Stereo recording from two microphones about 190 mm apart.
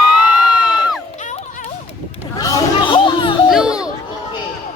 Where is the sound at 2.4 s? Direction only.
20° left (ahead or behind).